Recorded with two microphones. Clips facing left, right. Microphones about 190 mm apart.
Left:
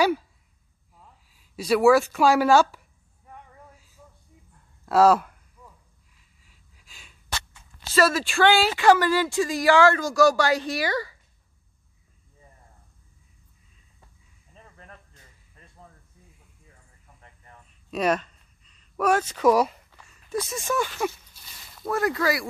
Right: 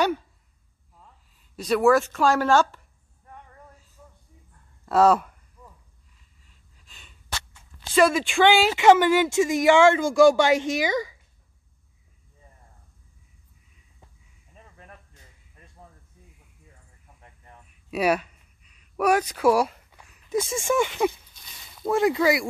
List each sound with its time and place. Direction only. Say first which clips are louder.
1.3 s speech: left 1 dB; 5° left (ahead or behind)
4.8 s speech: left 1 dB; 5° left (ahead or behind)
6.4 s gasp: left 1 dB; 5° left (ahead or behind)
7.9 s speech: right 2 dB; 15° right (ahead or behind)
14.5 s snake: even; 10° right (ahead or behind)
17.2 s a sound: right 1 dB; 10° right (ahead or behind)
20.4 s speech: right 4 dB; 25° right (ahead or behind)
21.3 s a sound: even; 5° left (ahead or behind)
21.8 s speech: right 4 dB; 20° right (ahead or behind)